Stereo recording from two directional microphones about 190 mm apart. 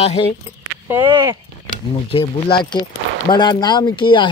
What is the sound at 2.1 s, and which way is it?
A man's voice, 25° left (ahead or behind).